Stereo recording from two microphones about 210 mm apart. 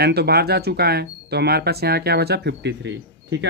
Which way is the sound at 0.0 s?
50° right (ahead or behind).